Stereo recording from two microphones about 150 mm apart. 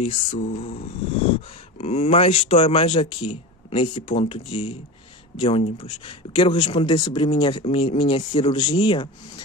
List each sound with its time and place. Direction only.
0.0 s speech: 40° left (ahead or behind)
0.4 s speech: 50° left (ahead or behind); by 9.1 s 35° left (ahead or behind)